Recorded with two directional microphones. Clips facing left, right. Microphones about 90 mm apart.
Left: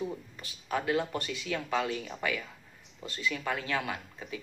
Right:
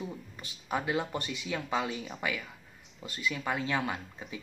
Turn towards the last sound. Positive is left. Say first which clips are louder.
# even
turn(degrees=-25)  # may be behind; listen again after turning